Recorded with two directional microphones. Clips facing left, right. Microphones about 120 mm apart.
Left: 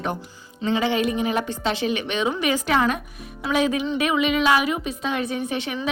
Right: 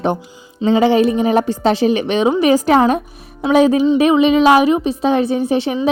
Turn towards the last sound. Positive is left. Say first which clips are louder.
# right 10 dB
turn(degrees=-30)  # may be behind; listen again after turning